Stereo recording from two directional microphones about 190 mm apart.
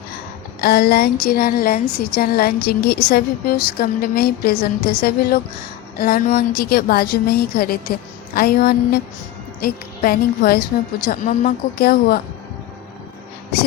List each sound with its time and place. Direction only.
0.6 s a woman's voice: 55° left (ahead or behind)